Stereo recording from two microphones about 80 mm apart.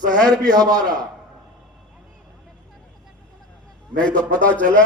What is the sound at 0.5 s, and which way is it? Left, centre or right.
Speech, right.